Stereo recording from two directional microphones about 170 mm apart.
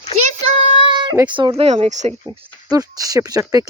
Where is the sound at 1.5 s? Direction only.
35° right (ahead or behind).